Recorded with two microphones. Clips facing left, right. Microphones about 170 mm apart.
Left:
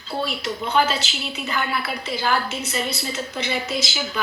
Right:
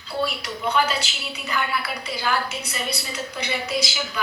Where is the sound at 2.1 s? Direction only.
25° left (ahead or behind).